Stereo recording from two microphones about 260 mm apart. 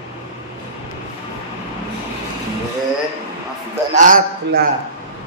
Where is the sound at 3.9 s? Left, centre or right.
Right.